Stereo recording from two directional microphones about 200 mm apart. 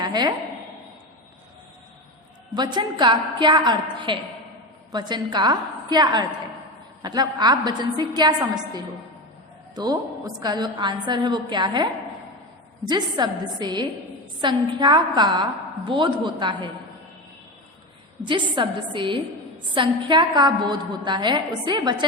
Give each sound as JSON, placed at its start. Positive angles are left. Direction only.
{"t": 0.0, "sound": "a woman's voice", "side_deg": -20}
{"t": 2.6, "sound": "a woman's voice", "side_deg": -20}
{"t": 12.9, "sound": "a woman's voice", "side_deg": -20}
{"t": 18.3, "sound": "a woman's voice", "side_deg": -25}